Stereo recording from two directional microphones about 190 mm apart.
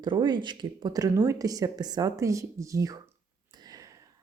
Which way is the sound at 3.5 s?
20° right (ahead or behind).